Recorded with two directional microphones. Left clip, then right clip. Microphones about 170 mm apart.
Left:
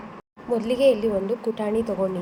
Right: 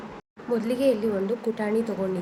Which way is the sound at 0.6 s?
20° left (ahead or behind).